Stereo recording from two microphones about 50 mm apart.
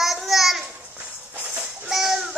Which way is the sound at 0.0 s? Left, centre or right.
Centre.